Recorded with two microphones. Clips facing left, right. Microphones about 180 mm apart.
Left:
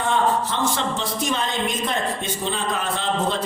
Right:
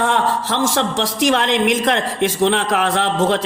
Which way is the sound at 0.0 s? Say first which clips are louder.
Right 2 dB; 90° right.